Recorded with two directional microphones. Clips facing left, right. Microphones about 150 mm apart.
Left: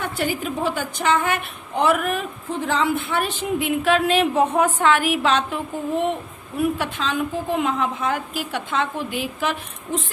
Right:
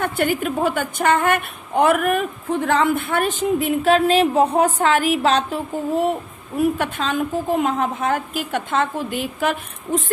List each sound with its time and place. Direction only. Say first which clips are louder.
0.0 s a woman's voice: right 4 dB; 55° right (ahead or behind); by 5.5 s 40° right (ahead or behind)
6.7 s a woman's voice: right 2 dB; 50° right (ahead or behind)